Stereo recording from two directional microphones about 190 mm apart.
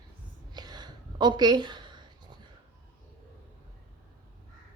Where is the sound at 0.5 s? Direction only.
20° right (ahead or behind).